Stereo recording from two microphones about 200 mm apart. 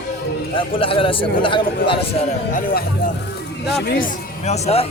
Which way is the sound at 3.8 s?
50° left (ahead or behind).